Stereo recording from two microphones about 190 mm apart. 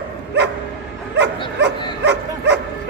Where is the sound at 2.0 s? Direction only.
65° right (ahead or behind).